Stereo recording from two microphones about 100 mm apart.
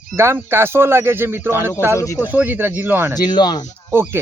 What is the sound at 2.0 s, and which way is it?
Speech, 30° left (ahead or behind).